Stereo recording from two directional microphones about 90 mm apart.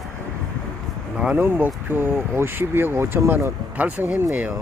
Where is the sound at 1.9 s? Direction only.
25° right (ahead or behind).